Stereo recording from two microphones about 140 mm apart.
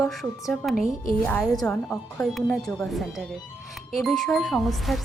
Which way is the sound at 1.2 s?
10° left (ahead or behind).